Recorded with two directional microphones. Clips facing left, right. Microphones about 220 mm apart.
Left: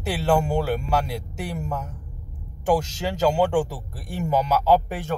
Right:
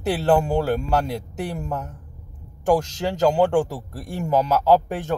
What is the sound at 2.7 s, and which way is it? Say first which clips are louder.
Speech: right 2 dB; 5° left (ahead or behind).